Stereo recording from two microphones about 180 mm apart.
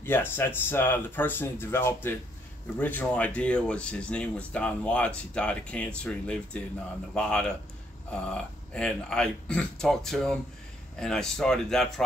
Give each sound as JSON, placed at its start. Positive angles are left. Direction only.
{"t": 0.0, "sound": "speech", "side_deg": 10}